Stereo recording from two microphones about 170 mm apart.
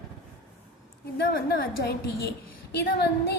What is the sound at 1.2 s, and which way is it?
A woman's voice, 65° left (ahead or behind).